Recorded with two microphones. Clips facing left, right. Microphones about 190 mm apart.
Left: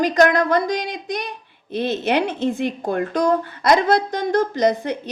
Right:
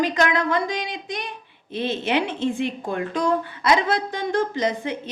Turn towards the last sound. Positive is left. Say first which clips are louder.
# left 5 dB
turn(degrees=40)  # may be behind; listen again after turning